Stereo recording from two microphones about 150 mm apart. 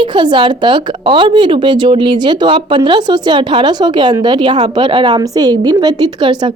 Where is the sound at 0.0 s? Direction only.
30° right (ahead or behind).